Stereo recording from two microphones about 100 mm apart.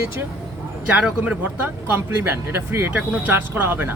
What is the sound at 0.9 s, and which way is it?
Speech, 15° right (ahead or behind).